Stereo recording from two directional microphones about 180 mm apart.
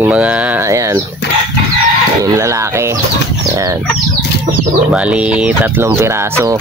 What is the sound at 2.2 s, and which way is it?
Speech, 20° right (ahead or behind).